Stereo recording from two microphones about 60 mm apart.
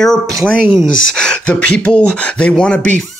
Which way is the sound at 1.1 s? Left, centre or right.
Centre.